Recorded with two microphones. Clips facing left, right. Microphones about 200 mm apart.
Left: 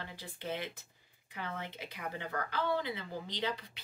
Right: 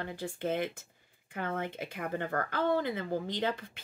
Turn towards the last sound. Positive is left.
turn(degrees=-50)  # may be behind; listen again after turning